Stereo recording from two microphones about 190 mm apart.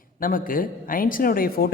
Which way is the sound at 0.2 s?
45° left (ahead or behind).